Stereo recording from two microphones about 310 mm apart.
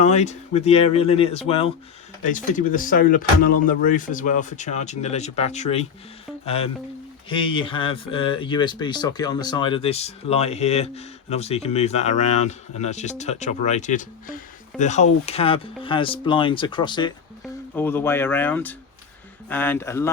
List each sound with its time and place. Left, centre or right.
0.0 s speech: left